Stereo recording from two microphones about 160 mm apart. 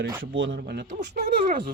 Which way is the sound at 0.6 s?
90° right.